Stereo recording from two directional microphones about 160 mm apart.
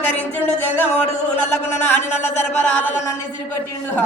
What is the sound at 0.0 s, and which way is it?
Music, 10° left (ahead or behind).